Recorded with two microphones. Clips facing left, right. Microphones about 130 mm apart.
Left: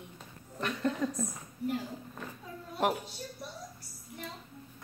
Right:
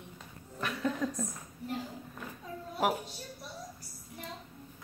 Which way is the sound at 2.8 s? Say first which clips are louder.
Even; 5° right (ahead or behind).